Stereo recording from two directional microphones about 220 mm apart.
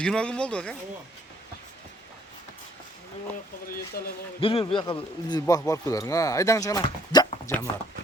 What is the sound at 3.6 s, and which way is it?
Speech, 40° left (ahead or behind).